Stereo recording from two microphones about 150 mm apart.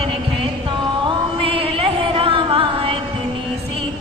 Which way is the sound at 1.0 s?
35° right (ahead or behind).